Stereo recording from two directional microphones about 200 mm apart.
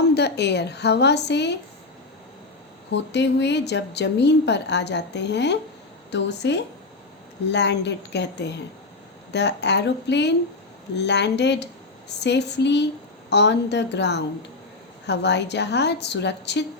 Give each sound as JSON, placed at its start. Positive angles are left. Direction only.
{"t": 0.1, "sound": "a woman's voice", "side_deg": 55}
{"t": 2.9, "sound": "a woman's voice", "side_deg": 60}